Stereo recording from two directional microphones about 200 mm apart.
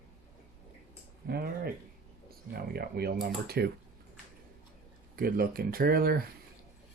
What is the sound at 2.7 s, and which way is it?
Speech, 50° right (ahead or behind).